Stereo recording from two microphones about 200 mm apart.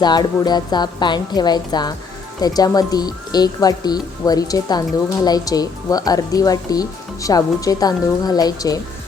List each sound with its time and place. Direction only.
0.0 s speech: 20° left (ahead or behind)